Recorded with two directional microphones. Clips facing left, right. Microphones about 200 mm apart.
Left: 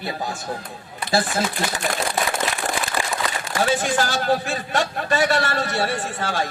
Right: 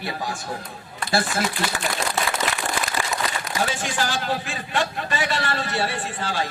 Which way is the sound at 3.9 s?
45° left (ahead or behind).